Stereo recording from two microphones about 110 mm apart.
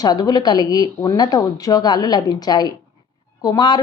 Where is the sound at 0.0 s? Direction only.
35° left (ahead or behind).